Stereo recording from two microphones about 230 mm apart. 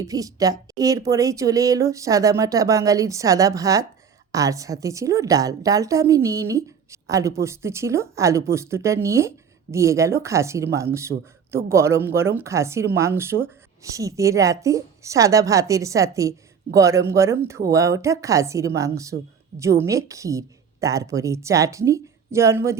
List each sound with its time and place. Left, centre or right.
0.0 s speech: centre
11.1 s speech: right
11.5 s speech: centre